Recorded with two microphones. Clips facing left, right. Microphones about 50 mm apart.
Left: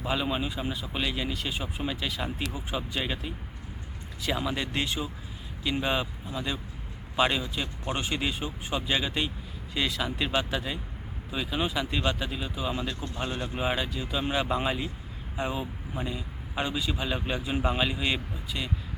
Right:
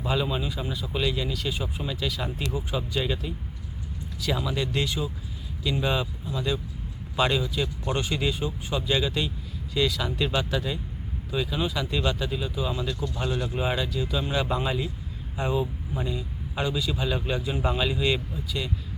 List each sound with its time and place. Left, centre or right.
0.0 s speech: centre
12.9 s speech: left
13.6 s speech: centre